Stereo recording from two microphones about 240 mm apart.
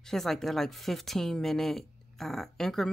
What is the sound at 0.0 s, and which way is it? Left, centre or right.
Speech, centre.